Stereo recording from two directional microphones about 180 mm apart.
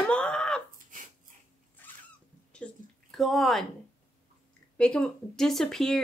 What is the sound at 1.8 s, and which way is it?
Cat, 10° left (ahead or behind).